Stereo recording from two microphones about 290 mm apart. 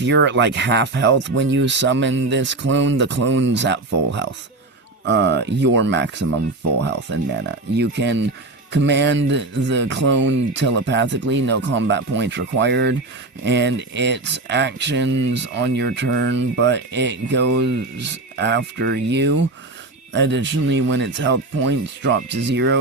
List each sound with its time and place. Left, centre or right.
0.0 s speech: right